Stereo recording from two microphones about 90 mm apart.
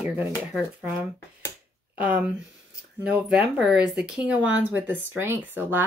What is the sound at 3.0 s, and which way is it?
Speech, 10° right (ahead or behind).